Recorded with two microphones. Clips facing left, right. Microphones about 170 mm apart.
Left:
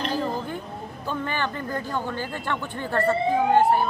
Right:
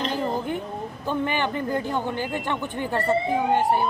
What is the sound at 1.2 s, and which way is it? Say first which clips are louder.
A man's voice: right 4 dB; 15° right (ahead or behind).